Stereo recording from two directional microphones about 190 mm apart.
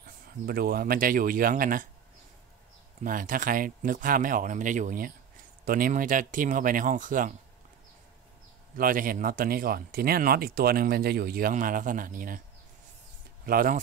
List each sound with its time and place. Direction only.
0.0 s speech: 55° right (ahead or behind)
3.0 s speech: 45° right (ahead or behind)
8.7 s speech: 50° right (ahead or behind)
13.5 s speech: 50° right (ahead or behind)